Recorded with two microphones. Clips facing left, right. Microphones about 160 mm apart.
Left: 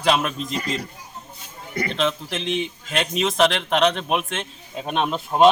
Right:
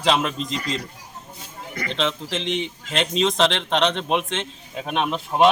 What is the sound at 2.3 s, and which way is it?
Speech, 90° right.